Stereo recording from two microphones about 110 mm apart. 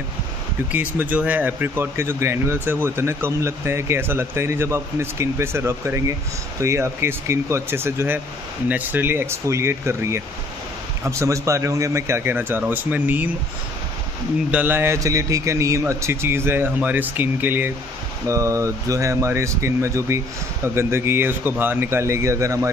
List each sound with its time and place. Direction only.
0.7 s speech: 15° right (ahead or behind)
14.5 s speech: 20° right (ahead or behind)
18.2 s speech: 30° right (ahead or behind)